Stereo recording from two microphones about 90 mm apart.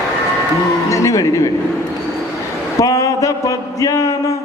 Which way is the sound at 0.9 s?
35° left (ahead or behind).